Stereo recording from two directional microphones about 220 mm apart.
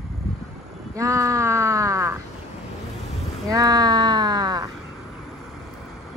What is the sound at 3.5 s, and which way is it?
Speech, 15° right (ahead or behind).